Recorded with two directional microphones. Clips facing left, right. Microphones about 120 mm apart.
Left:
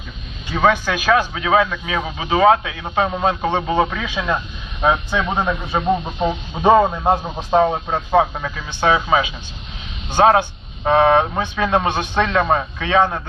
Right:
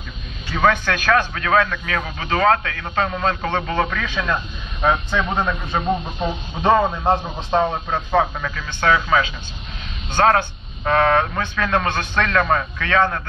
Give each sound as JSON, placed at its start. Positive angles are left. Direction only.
{"t": 0.5, "sound": "a man's voice", "side_deg": 10}